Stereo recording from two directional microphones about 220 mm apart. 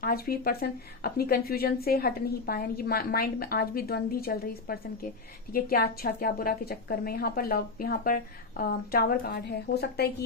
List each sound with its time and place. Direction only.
0.0 s a woman's voice: 45° left (ahead or behind)